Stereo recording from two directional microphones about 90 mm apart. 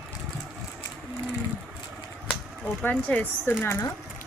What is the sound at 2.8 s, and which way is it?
Speech, 20° left (ahead or behind).